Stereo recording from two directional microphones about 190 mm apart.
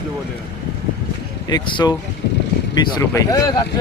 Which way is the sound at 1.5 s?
25° left (ahead or behind).